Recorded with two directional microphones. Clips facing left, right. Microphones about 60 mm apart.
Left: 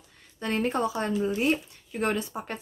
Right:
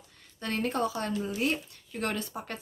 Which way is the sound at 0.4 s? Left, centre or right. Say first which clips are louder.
Left 3 dB; left.